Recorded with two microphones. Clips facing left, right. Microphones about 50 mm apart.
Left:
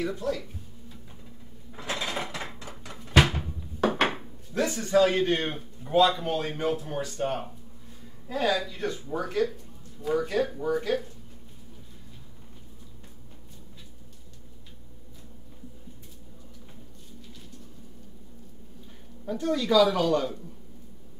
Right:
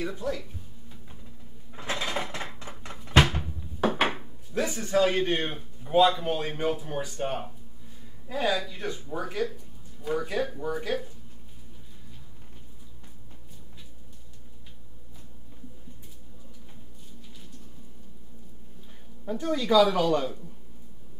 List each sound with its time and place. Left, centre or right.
0.0 s speech: centre
2.0 s mechanisms: centre
2.8 s cupboard open or close: right
3.3 s a sound: centre
4.9 s a man's voice: centre
19.2 s speech: centre